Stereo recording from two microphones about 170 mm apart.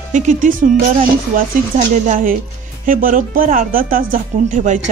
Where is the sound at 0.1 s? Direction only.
50° right (ahead or behind).